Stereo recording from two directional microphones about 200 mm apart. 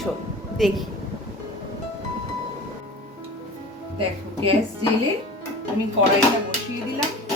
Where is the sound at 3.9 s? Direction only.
25° right (ahead or behind).